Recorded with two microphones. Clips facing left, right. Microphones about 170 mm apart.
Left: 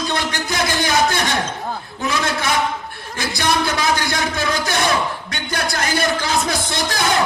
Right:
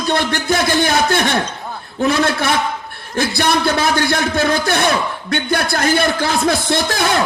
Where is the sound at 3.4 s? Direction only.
55° right (ahead or behind).